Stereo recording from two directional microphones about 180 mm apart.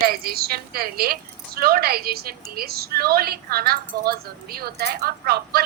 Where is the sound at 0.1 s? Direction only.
55° right (ahead or behind).